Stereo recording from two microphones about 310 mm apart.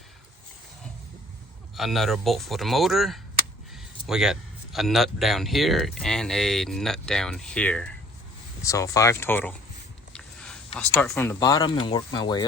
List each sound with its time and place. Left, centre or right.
1.7 s speech: centre
10.1 s a sound: centre
11.0 s speech: centre